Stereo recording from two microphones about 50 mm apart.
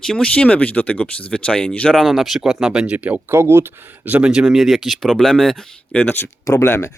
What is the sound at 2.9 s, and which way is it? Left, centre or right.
Speech, right.